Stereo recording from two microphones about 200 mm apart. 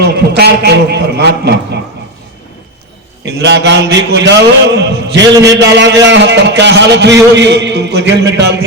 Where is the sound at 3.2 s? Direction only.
60° right (ahead or behind).